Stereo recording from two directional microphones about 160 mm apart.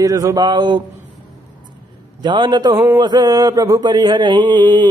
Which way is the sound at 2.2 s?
30° right (ahead or behind).